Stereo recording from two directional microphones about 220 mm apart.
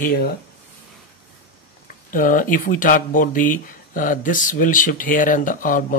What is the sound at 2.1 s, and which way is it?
Speech, 40° left (ahead or behind).